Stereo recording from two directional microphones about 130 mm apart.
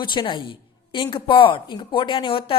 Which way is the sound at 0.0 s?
40° left (ahead or behind).